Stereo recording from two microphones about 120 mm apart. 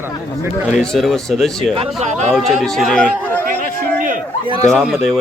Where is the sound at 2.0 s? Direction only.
75° right (ahead or behind).